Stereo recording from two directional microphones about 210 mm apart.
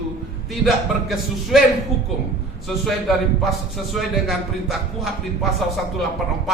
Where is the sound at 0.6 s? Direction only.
Centre (ahead or behind).